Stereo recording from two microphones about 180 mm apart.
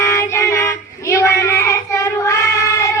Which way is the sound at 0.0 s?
15° left (ahead or behind).